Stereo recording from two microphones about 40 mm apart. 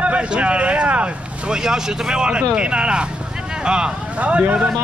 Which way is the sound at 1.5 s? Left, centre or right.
Centre.